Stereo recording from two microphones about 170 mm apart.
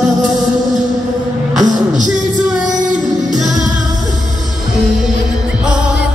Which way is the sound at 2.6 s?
Centre (ahead or behind).